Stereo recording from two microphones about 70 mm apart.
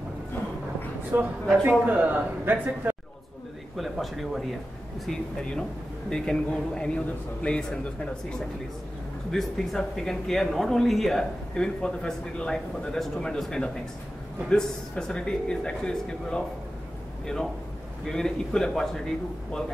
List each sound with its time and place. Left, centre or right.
1.1 s a man's voice: right
3.7 s speech: centre
5.0 s speech: centre
18.0 s speech: centre